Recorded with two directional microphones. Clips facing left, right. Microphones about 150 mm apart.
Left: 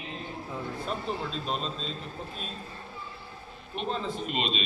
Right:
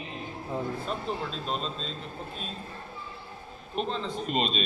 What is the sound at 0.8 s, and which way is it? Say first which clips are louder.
A man's voice: even; centre (ahead or behind).